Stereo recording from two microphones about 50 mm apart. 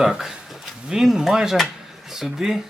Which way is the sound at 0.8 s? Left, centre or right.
Centre.